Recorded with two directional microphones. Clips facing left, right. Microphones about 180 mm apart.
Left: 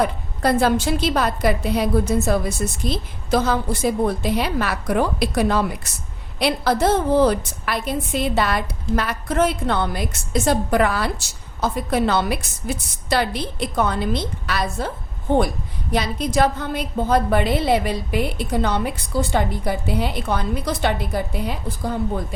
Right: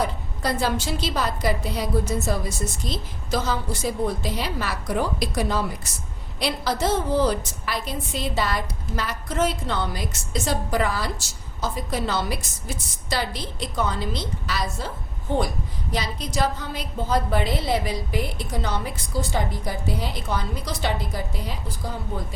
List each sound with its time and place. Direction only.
0.0 s a woman's voice: 55° left (ahead or behind)